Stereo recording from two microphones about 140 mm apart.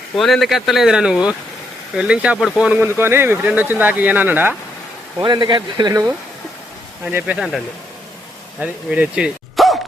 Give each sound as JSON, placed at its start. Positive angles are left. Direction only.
{"t": 0.2, "sound": "speech", "side_deg": 0}
{"t": 5.2, "sound": "speech", "side_deg": -35}
{"t": 7.0, "sound": "speech", "side_deg": -15}
{"t": 7.3, "sound": "speech", "side_deg": 0}